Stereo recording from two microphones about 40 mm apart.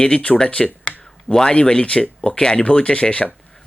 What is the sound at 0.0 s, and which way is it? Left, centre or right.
Speech, left.